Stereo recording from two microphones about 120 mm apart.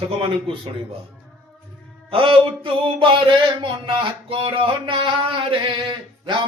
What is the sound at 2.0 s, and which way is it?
Speech, 50° right (ahead or behind).